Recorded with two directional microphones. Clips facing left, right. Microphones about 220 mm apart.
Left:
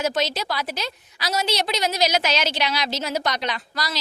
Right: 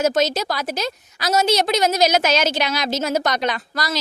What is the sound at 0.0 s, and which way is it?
A woman's voice, 45° right (ahead or behind).